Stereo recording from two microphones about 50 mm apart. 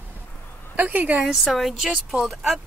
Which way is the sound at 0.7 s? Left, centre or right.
Right.